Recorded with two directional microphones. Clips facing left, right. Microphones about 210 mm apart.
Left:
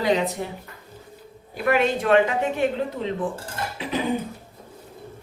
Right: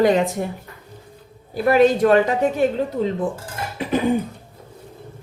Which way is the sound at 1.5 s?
35° right (ahead or behind).